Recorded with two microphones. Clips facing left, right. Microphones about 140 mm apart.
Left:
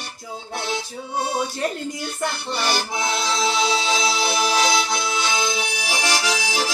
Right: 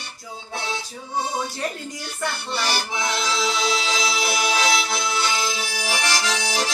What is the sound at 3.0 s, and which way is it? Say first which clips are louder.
Music: left 2 dB; 25° left (ahead or behind).